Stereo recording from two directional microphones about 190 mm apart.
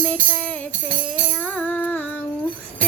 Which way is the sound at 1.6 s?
5° left (ahead or behind).